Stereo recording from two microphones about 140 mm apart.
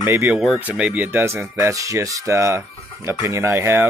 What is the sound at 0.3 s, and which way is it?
Speech, 5° right (ahead or behind).